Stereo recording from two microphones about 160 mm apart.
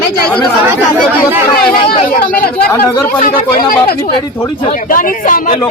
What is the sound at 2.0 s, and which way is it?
Speech, 55° left (ahead or behind).